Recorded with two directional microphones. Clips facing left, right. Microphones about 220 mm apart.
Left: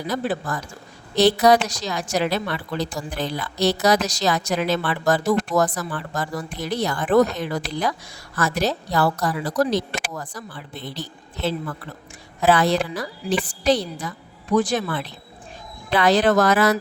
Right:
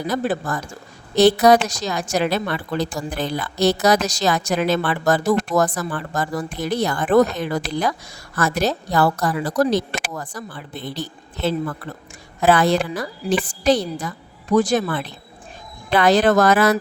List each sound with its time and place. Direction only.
0.1 s a woman's voice: 50° right (ahead or behind)